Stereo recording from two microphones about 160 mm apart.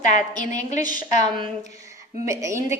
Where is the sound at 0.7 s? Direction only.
50° left (ahead or behind).